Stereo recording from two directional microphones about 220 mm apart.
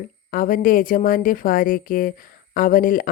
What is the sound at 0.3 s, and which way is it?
A woman's voice, 40° left (ahead or behind).